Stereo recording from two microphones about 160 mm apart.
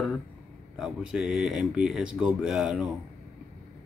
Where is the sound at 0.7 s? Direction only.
5° right (ahead or behind).